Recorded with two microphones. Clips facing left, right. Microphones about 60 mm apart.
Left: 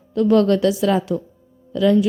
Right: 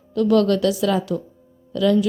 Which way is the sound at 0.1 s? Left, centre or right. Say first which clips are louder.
Left 2 dB; left.